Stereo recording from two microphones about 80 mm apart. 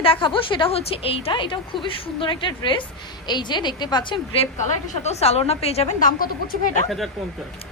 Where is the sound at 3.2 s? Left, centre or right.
Left.